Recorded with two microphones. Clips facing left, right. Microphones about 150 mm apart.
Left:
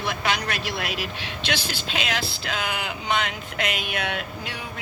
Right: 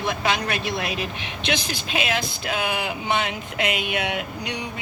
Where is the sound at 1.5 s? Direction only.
5° right (ahead or behind).